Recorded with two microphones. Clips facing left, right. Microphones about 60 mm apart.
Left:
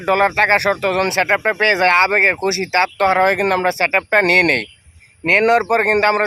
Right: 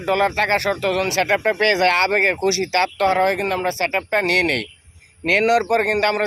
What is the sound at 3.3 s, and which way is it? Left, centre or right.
Speech, left.